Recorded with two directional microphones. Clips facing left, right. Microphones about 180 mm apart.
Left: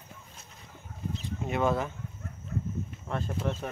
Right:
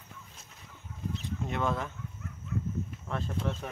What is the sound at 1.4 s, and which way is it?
Speech, 5° left (ahead or behind).